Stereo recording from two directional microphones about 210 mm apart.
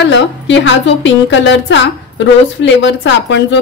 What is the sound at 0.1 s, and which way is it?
A woman's voice, 60° left (ahead or behind).